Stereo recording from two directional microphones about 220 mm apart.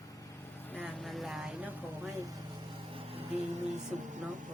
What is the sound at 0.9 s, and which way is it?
A woman's voice, centre (ahead or behind).